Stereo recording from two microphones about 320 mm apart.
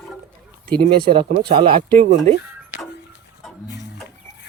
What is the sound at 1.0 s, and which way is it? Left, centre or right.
Speech, centre.